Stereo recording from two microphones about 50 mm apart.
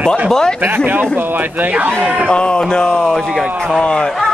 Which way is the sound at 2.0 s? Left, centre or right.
Centre.